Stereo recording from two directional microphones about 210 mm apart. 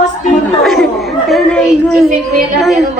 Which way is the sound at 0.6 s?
Centre (ahead or behind).